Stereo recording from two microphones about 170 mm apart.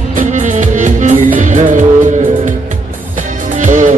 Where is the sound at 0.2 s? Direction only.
45° right (ahead or behind).